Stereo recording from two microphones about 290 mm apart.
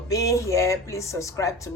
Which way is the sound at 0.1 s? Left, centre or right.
Centre.